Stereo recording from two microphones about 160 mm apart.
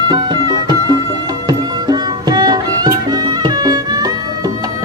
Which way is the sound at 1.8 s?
25° right (ahead or behind).